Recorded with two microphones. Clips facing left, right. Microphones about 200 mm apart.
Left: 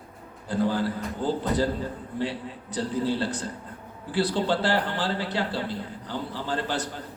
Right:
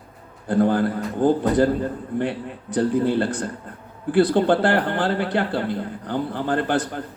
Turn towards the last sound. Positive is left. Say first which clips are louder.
# right 7 dB
turn(degrees=-55)  # may be behind; listen again after turning